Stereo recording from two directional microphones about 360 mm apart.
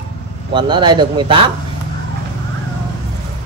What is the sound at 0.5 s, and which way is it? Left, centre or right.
A man's voice, centre.